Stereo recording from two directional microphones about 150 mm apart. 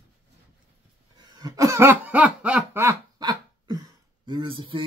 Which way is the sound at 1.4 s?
25° right (ahead or behind).